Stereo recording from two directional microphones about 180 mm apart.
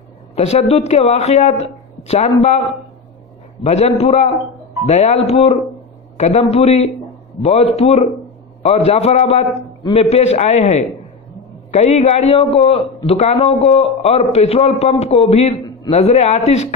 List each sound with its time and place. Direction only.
0.4 s a man's voice: 35° left (ahead or behind)